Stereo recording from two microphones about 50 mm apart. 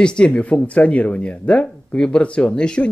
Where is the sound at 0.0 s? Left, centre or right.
Centre.